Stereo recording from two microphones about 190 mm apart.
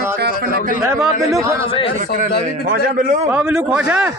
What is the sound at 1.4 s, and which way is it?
Speech, 15° right (ahead or behind).